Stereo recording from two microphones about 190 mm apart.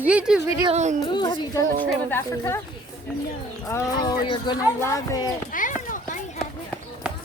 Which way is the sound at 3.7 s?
15° left (ahead or behind).